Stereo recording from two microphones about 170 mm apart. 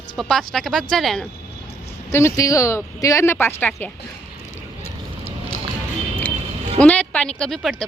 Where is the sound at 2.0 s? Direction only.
15° left (ahead or behind).